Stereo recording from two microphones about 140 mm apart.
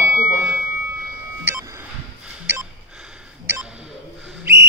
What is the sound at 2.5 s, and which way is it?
Gasp, 15° right (ahead or behind).